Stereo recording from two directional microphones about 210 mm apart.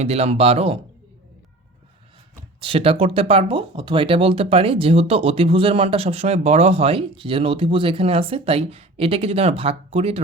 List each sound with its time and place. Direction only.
0.0 s speech: 30° right (ahead or behind)
2.6 s speech: 25° right (ahead or behind)